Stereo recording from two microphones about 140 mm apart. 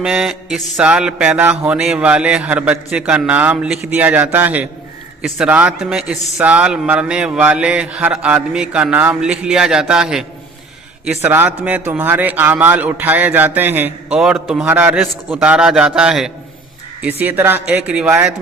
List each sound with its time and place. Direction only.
0.0 s a man's voice: 5° right (ahead or behind)
14.2 s a man's voice: 5° right (ahead or behind)